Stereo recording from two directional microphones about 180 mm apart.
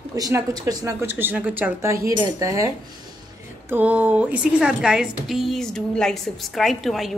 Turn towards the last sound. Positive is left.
turn(degrees=0)  # may be behind; listen again after turning